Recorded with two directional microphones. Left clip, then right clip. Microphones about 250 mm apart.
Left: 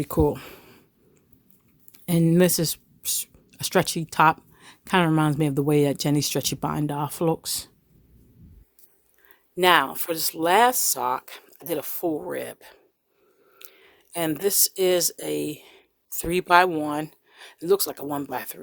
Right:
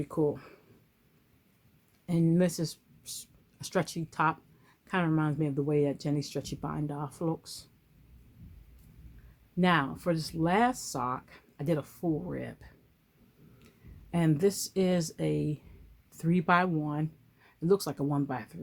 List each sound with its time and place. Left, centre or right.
0.0 s speech: left
2.0 s speech: left
9.6 s speech: left
13.6 s a sound: left
14.1 s speech: left